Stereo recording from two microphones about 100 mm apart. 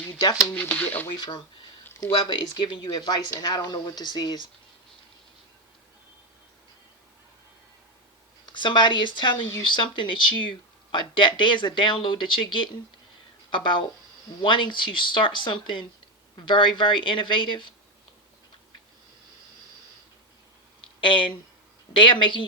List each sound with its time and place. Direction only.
0.2 s speech: 40° left (ahead or behind)
0.5 s speech: 15° left (ahead or behind)
1.9 s a sound: 35° left (ahead or behind)
2.1 s speech: 55° left (ahead or behind)
8.5 s speech: 50° left (ahead or behind)
21.0 s speech: 55° left (ahead or behind)